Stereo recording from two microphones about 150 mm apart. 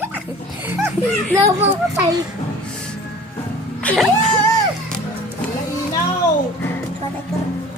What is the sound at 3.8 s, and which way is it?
Speech, centre (ahead or behind).